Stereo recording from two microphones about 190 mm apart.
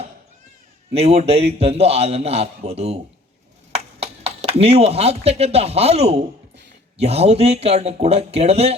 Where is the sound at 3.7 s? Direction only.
30° right (ahead or behind).